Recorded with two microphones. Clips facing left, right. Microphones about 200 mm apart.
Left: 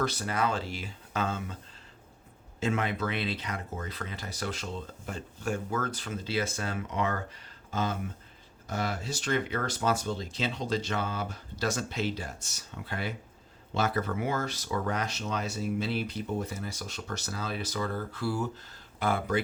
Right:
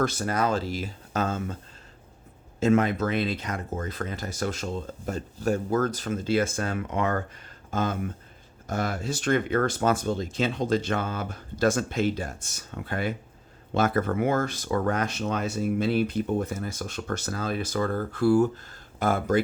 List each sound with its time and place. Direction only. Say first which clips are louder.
0.0 s speech: right 4 dB; 45° right (ahead or behind)
2.6 s speech: right 8 dB; 45° right (ahead or behind)